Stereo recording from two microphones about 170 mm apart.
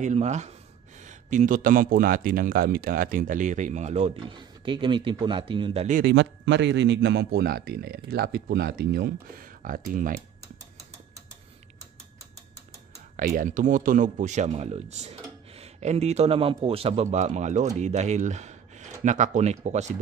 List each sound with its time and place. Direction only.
0.0 s speech: 40° right (ahead or behind)
4.3 s speech: 30° right (ahead or behind)
5.9 s speech: 80° right; by 10.2 s 50° right (ahead or behind)
13.1 s speech: 55° right (ahead or behind)